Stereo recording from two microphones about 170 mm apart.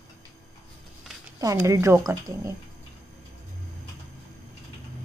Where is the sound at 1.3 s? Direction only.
20° right (ahead or behind).